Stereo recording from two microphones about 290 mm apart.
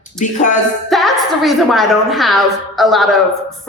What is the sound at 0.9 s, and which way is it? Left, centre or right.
A woman's voice, centre.